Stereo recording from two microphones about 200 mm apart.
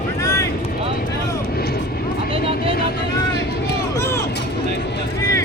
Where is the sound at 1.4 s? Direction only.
50° left (ahead or behind).